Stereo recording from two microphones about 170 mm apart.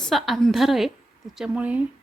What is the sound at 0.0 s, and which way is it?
A woman's voice, centre (ahead or behind).